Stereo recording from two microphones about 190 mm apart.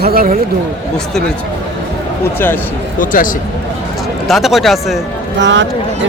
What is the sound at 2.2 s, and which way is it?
Speech, 10° left (ahead or behind).